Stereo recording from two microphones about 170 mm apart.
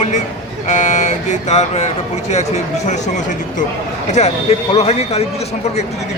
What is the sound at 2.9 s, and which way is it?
Speech, 45° left (ahead or behind).